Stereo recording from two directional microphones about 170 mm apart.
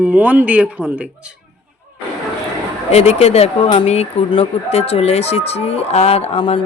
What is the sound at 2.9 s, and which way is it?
Speech, 40° left (ahead or behind).